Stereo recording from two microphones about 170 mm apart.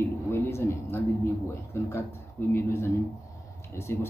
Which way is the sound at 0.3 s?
15° left (ahead or behind).